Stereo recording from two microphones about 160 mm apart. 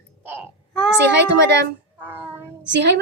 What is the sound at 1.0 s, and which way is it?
Speech, 90° right.